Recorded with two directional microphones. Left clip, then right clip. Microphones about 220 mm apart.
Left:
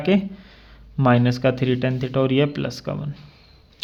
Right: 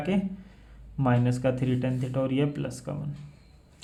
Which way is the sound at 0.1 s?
35° left (ahead or behind).